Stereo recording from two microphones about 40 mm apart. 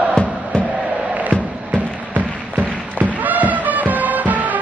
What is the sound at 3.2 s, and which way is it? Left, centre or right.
Music, right.